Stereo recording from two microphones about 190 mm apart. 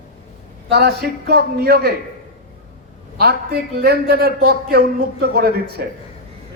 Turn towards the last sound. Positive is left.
turn(degrees=-55)  # may be behind; listen again after turning